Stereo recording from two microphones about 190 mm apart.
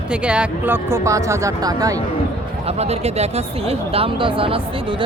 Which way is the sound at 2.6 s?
35° right (ahead or behind).